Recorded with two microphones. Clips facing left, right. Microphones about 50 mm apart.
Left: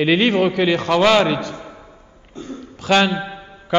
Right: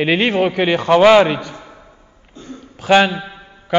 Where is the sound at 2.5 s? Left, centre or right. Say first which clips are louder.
Right 4 dB; centre.